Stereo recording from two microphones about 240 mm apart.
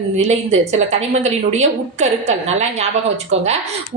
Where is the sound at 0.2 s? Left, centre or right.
Right.